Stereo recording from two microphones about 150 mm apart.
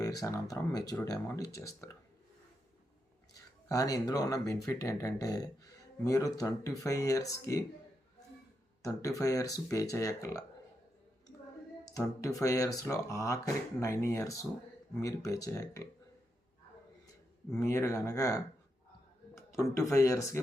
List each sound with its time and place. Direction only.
0.0 s speech: 25° left (ahead or behind)
3.7 s speech: 25° left (ahead or behind)
8.8 s speech: 20° left (ahead or behind)
11.9 s speech: 20° left (ahead or behind)
17.5 s speech: 20° left (ahead or behind)
19.7 s speech: 20° left (ahead or behind)